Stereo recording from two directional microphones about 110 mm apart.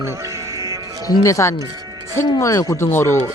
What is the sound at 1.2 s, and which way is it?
A man's voice, 30° left (ahead or behind).